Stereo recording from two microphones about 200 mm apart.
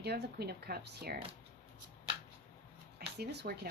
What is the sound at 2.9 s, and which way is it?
Speech, 55° right (ahead or behind).